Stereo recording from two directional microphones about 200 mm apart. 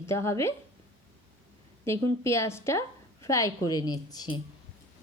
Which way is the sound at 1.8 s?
15° left (ahead or behind).